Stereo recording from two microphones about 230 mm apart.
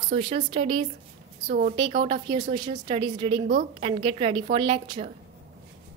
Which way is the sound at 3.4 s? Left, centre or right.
Right.